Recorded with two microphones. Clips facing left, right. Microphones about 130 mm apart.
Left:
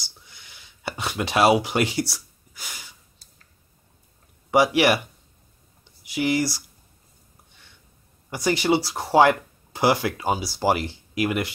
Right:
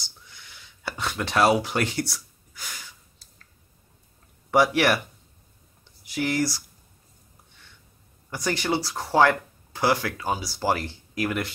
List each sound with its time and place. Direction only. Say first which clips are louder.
0.8 s speech: left 2 dB; 10° left (ahead or behind)
4.5 s speech: left 2 dB; 5° left (ahead or behind)
6.0 s speech: left 2 dB; 5° left (ahead or behind)
8.3 s speech: left 5 dB; 10° left (ahead or behind)